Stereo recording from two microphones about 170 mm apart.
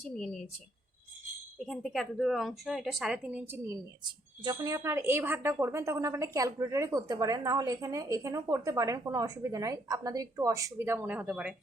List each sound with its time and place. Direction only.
1.6 s speech: centre (ahead or behind)
4.0 s a woman's voice: 25° right (ahead or behind); by 11.5 s 5° right (ahead or behind)